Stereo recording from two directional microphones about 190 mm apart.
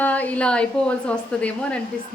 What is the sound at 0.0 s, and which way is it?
Speech, 10° left (ahead or behind).